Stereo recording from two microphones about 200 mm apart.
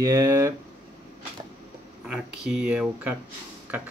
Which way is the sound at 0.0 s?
15° right (ahead or behind).